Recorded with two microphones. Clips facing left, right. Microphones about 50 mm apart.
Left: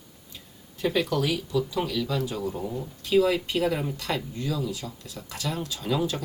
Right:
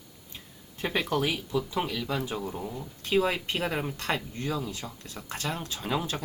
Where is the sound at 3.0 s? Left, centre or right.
Right.